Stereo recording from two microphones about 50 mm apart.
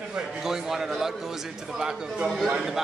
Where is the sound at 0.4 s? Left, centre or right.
Centre.